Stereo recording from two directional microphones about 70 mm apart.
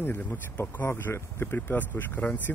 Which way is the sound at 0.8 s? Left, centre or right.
Left.